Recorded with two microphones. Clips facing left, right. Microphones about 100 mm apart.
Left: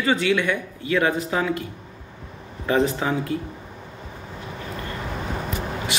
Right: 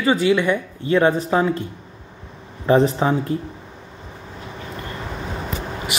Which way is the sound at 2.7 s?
30° right (ahead or behind).